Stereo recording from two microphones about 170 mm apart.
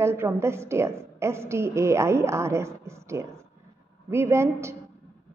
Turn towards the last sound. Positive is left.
turn(degrees=-15)  # may be behind; listen again after turning